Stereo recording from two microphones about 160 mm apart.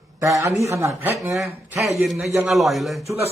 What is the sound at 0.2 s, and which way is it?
Speech, 15° right (ahead or behind).